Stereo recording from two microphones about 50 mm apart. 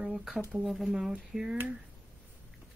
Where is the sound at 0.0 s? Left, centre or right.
Centre.